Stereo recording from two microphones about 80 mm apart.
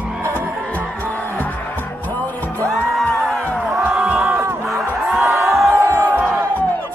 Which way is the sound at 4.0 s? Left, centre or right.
Centre.